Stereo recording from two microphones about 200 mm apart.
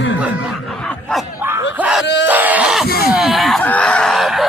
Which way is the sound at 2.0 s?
60° left (ahead or behind).